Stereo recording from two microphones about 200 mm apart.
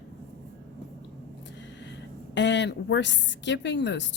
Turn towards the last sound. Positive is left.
turn(degrees=60)  # may be behind; listen again after turning